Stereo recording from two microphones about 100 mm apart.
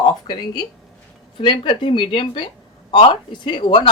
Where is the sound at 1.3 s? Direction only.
60° left (ahead or behind).